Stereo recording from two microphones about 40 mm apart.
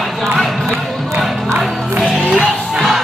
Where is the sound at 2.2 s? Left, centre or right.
Left.